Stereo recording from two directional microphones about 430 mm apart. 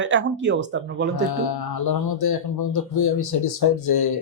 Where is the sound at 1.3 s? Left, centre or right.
Left.